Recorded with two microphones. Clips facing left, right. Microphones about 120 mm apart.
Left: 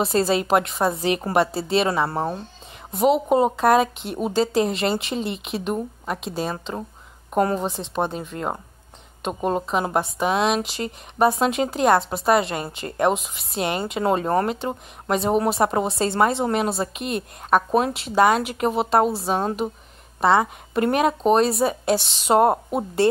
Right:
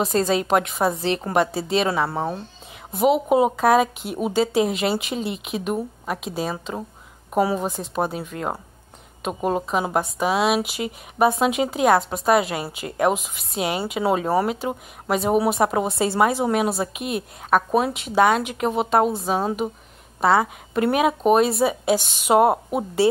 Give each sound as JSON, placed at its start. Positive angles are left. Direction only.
{"t": 0.0, "sound": "speech", "side_deg": 0}